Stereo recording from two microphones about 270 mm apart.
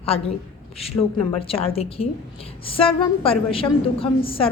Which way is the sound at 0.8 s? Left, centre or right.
Left.